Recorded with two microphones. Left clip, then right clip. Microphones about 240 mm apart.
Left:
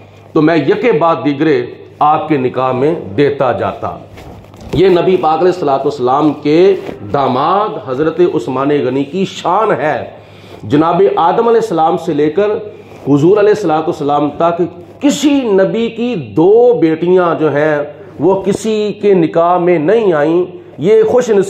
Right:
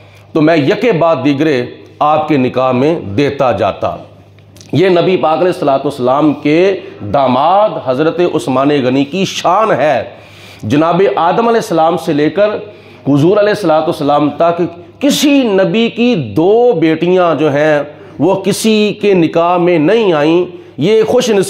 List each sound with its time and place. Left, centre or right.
0.3 s a man's voice: right